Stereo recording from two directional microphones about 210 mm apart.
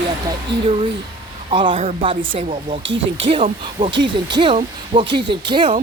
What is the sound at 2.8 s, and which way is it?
Speech, 60° right (ahead or behind).